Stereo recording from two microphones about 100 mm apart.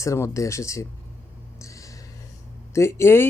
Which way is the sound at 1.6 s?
35° left (ahead or behind).